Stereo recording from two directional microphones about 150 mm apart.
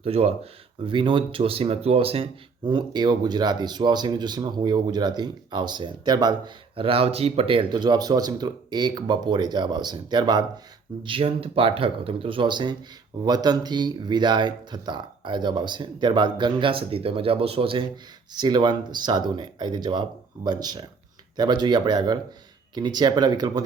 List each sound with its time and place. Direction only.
0.0 s speech: 45° right (ahead or behind)
0.9 s speech: 35° right (ahead or behind)